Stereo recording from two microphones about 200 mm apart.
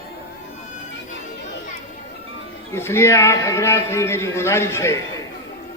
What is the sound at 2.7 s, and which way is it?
A man's voice, 10° left (ahead or behind).